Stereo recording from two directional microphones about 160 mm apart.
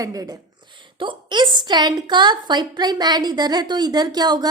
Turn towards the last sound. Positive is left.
turn(degrees=-25)  # may be behind; listen again after turning